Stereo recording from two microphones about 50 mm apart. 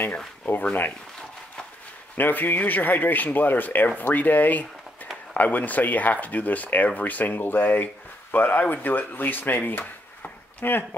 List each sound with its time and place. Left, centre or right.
0.5 s speech: left
2.1 s speech: left